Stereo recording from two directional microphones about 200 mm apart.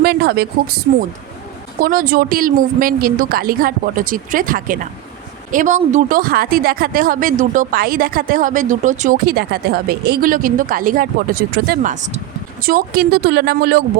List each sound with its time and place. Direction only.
0.0 s speech: 50° right (ahead or behind)
1.8 s speech: 45° right (ahead or behind)